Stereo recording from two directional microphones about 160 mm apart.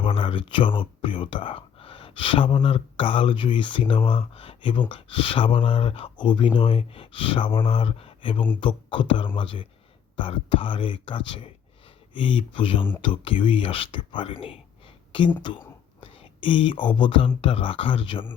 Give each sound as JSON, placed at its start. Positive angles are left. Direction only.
{"t": 0.0, "sound": "speech", "side_deg": 35}